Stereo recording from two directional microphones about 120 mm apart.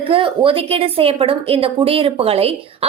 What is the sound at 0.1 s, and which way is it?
A woman's voice, 50° right (ahead or behind).